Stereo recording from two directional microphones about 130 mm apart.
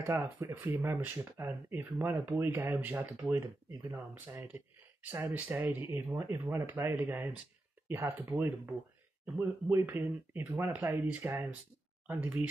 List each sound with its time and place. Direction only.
0.0 s speech: 20° right (ahead or behind)